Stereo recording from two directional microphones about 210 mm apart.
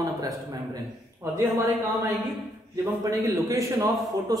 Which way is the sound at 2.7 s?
15° right (ahead or behind).